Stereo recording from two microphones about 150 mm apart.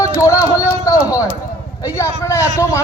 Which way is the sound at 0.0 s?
20° left (ahead or behind).